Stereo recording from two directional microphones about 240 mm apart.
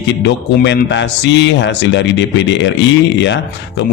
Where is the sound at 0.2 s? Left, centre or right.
Left.